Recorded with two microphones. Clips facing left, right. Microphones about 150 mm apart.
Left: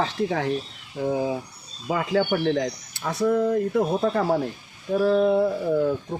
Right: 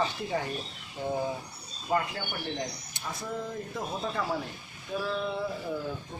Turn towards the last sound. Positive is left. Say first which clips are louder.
# left 11 dB
turn(degrees=55)  # may be behind; listen again after turning